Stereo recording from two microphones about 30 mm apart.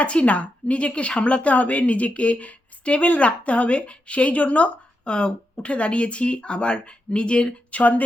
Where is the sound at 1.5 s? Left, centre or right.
Left.